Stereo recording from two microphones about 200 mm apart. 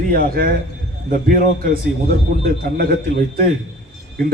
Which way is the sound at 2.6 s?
50° right (ahead or behind).